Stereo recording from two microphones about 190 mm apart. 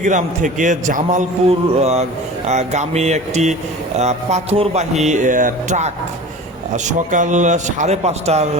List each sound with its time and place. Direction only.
0.0 s a man's voice: 40° right (ahead or behind)
7.1 s a man's voice: 40° right (ahead or behind)